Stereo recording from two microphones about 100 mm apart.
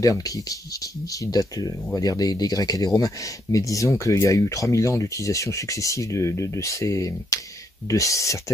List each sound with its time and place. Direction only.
0.0 s speech: 35° left (ahead or behind)